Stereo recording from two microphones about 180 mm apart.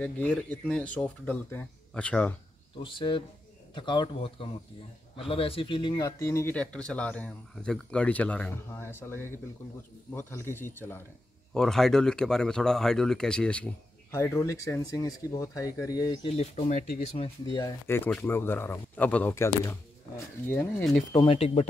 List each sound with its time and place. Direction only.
0.0 s speech: 5° left (ahead or behind)
2.8 s speech: 25° left (ahead or behind)
16.3 s speech: 35° left (ahead or behind)
17.5 s speech: 20° left (ahead or behind)
21.1 s speech: 25° left (ahead or behind)